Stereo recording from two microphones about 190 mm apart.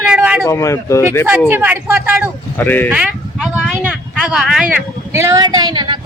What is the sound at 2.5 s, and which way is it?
Speech, 10° left (ahead or behind).